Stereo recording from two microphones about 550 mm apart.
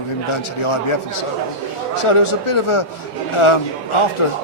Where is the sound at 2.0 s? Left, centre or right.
Left.